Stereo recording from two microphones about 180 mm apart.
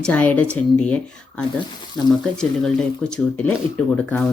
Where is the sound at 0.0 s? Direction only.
10° left (ahead or behind).